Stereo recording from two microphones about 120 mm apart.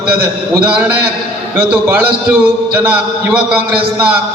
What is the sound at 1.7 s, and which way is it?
A man's voice, 15° right (ahead or behind).